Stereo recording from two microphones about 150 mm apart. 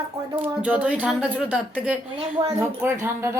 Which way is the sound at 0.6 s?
10° right (ahead or behind).